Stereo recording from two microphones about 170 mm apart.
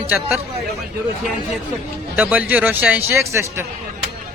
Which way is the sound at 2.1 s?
10° right (ahead or behind).